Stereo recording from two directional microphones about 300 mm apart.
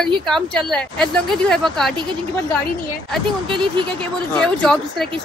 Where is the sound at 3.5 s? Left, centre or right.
Centre.